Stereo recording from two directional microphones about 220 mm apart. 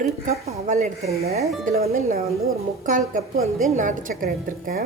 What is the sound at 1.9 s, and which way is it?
A woman's voice, 40° right (ahead or behind).